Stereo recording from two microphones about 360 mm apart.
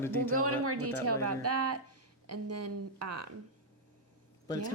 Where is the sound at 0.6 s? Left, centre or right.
Right.